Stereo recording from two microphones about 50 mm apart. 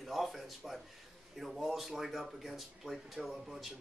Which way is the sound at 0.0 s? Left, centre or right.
Centre.